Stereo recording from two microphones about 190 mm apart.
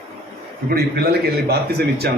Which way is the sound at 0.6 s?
55° right (ahead or behind).